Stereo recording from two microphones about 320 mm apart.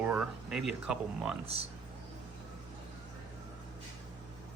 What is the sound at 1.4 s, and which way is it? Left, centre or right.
Speech, centre.